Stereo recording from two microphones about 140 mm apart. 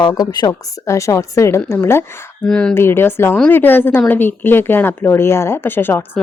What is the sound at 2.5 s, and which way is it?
Speech, 5° left (ahead or behind).